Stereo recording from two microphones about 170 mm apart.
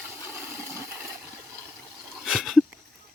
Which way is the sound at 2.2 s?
Centre (ahead or behind).